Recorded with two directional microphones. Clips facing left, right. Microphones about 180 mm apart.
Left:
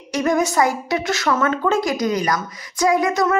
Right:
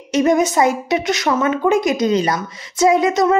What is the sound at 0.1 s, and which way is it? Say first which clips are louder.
A woman's voice: right 4 dB; 20° right (ahead or behind).